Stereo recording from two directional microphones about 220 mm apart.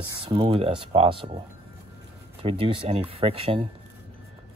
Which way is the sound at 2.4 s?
25° right (ahead or behind).